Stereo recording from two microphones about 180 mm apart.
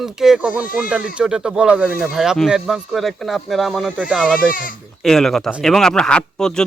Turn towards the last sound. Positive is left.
turn(degrees=5)  # may be behind; listen again after turning